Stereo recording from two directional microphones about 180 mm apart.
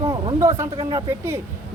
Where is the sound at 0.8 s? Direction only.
25° right (ahead or behind).